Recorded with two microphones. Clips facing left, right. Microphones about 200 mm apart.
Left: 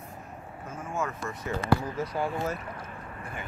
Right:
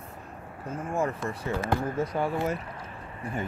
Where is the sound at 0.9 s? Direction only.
30° right (ahead or behind).